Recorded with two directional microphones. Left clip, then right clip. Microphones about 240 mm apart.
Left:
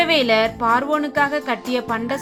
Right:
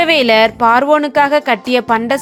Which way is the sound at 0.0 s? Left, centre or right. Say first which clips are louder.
Right 6 dB; right.